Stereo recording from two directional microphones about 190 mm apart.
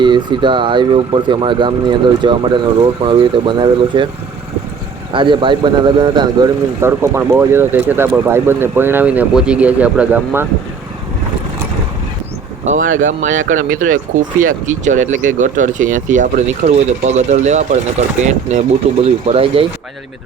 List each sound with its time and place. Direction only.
0.0 s speech: 25° right (ahead or behind)
5.1 s speech: 25° right (ahead or behind); by 10.4 s 10° right (ahead or behind)
12.6 s speech: 40° right (ahead or behind)
12.9 s speech: 90° right
13.5 s speech: 45° right (ahead or behind)